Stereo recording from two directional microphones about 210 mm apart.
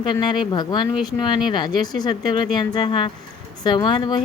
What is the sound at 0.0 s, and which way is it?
Speech, 20° left (ahead or behind).